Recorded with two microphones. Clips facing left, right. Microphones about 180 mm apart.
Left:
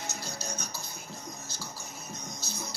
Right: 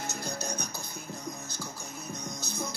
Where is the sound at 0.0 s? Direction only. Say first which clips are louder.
Right 4 dB; 55° right (ahead or behind).